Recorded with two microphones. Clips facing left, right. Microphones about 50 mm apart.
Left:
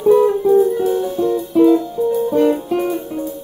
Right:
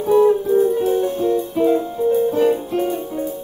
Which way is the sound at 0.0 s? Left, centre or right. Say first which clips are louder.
Left 2 dB; centre.